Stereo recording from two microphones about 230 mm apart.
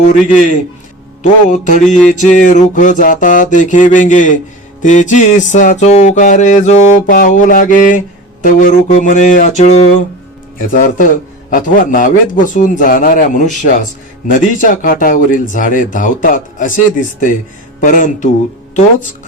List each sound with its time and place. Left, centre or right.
0.0 s music: left